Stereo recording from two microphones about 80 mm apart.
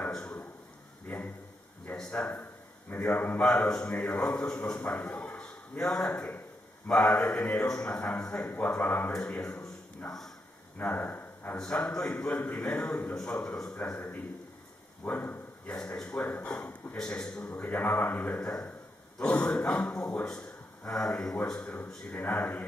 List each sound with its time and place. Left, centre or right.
0.0 s a sound: centre
1.9 s speech: centre
9.1 s speech: centre
13.7 s speech: centre
15.0 s speech: centre
17.6 s speech: left
18.4 s speech: centre
22.1 s speech: left